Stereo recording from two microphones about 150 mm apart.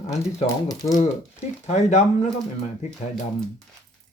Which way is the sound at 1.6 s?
50° left (ahead or behind).